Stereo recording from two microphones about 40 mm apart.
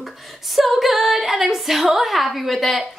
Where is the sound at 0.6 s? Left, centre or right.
Centre.